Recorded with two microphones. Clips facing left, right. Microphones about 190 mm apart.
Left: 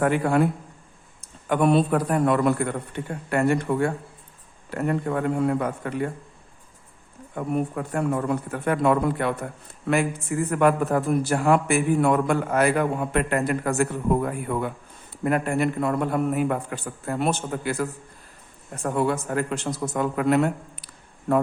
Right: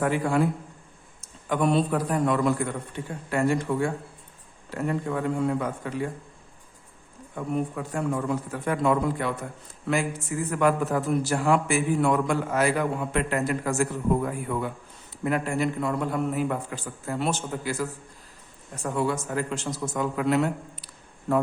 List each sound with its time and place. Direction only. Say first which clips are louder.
0.0 s a man's voice: left 3 dB; 60° left (ahead or behind)
7.3 s a man's voice: left 3 dB; 55° left (ahead or behind)